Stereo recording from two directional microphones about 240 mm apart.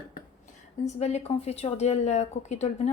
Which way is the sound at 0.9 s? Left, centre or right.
Left.